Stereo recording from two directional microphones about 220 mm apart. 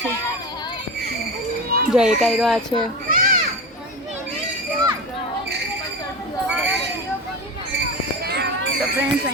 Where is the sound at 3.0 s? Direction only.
40° right (ahead or behind).